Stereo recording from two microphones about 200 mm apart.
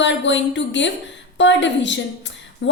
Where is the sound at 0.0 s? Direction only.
65° left (ahead or behind).